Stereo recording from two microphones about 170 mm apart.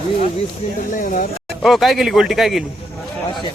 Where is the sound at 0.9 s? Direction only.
50° left (ahead or behind).